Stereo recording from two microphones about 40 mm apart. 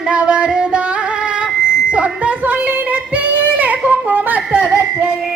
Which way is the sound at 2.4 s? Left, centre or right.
Right.